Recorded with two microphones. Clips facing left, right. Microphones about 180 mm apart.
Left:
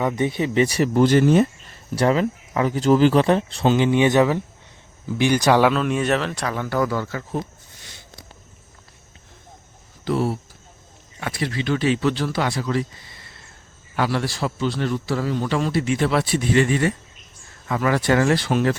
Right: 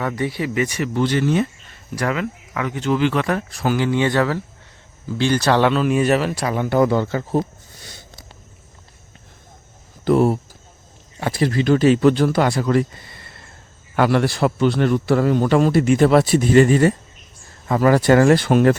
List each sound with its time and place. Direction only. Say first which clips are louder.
0.0 s speech: left 1 dB; 20° left (ahead or behind); by 1.5 s 40° left (ahead or behind)
2.0 s speech: left 4 dB; 30° left (ahead or behind); by 7.9 s 35° right (ahead or behind)
10.0 s speech: right 7 dB; 50° right (ahead or behind)
11.2 s a man's voice: right 6 dB; 40° right (ahead or behind)